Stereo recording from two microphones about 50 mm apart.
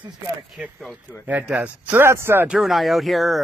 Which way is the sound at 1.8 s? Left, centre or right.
Right.